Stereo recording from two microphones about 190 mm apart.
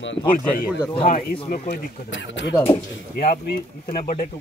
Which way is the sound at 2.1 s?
75° left (ahead or behind).